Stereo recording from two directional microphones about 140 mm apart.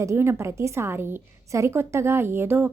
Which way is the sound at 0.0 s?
20° right (ahead or behind).